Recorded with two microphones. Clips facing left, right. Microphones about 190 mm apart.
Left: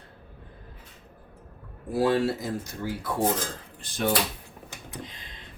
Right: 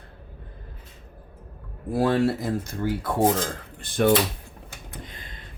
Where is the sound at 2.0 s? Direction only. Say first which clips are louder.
Right 2 dB; 55° right (ahead or behind).